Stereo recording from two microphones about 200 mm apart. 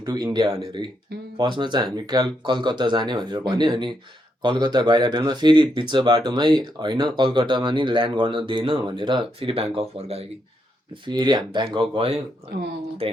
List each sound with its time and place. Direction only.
0.0 s speech: 20° right (ahead or behind)